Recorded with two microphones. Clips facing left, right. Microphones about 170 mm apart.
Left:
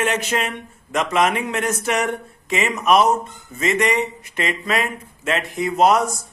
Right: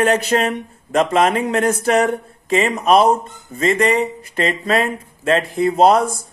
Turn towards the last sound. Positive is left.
turn(degrees=-30)  # may be behind; listen again after turning